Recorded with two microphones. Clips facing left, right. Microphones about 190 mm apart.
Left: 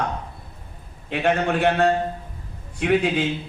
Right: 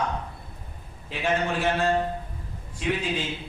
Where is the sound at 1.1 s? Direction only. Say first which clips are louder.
Left 5 dB; 65° left (ahead or behind).